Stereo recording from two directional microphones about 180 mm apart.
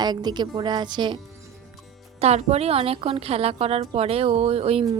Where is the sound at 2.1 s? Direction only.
35° right (ahead or behind).